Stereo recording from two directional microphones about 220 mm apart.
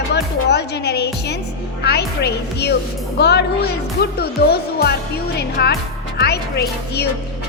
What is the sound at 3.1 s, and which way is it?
A woman's voice, 50° left (ahead or behind).